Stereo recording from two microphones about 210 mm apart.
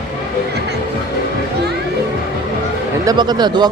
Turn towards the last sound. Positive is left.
turn(degrees=-20)  # may be behind; listen again after turning